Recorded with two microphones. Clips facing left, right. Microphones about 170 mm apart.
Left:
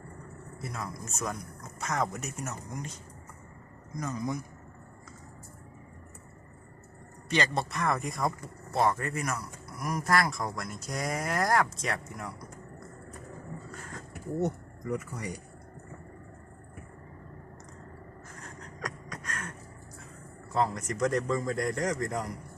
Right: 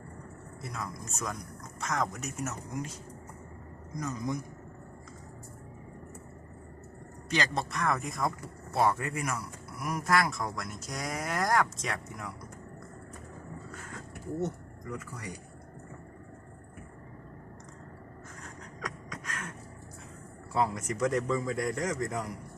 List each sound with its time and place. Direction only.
0.6 s speech: centre (ahead or behind)
3.9 s speech: centre (ahead or behind)
7.3 s speech: centre (ahead or behind)
13.7 s vehicle: centre (ahead or behind)
14.3 s speech: 15° left (ahead or behind)
18.4 s a sound: centre (ahead or behind)
20.5 s speech: 5° right (ahead or behind)